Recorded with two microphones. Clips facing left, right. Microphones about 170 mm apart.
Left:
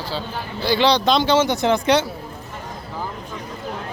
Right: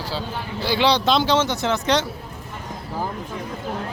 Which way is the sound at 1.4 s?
15° left (ahead or behind).